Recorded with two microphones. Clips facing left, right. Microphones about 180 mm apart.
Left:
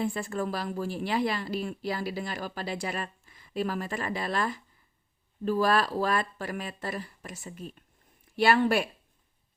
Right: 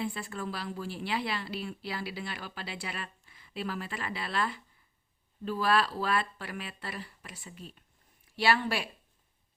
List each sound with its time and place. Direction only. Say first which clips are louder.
0.0 s a woman's voice: left 5 dB; 45° left (ahead or behind)